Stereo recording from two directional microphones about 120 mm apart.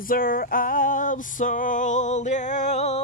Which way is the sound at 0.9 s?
90° left.